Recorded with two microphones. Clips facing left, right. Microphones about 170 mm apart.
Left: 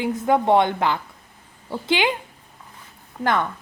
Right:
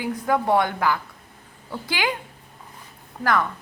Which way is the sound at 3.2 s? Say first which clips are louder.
Left 1 dB; 25° left (ahead or behind).